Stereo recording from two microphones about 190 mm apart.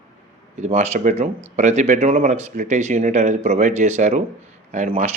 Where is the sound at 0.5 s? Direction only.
40° right (ahead or behind).